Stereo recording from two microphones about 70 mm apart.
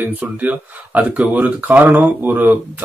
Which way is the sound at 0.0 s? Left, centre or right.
Right.